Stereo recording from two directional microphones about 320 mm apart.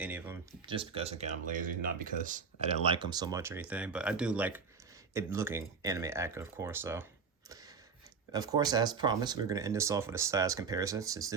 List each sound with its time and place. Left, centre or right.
0.0 s speech: centre
8.3 s speech: centre